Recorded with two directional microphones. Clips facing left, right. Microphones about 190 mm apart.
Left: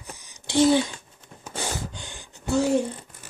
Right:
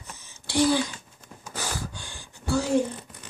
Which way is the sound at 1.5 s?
25° left (ahead or behind).